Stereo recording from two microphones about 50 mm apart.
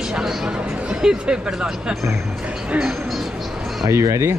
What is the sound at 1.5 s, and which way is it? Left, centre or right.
Speech, centre.